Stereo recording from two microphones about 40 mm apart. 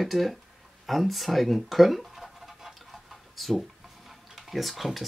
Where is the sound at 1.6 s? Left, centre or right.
Centre.